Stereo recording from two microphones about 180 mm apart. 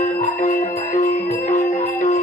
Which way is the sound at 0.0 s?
45° left (ahead or behind).